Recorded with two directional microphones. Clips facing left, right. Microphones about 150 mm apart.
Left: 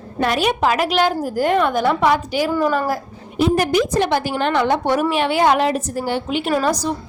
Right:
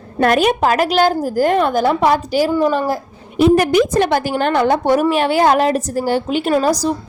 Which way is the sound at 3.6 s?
60° right (ahead or behind).